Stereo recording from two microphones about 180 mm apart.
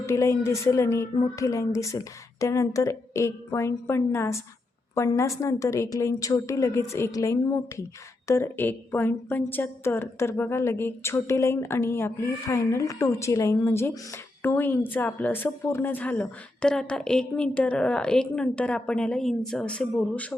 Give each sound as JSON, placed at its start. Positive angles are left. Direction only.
{"t": 0.0, "sound": "a woman's voice", "side_deg": 15}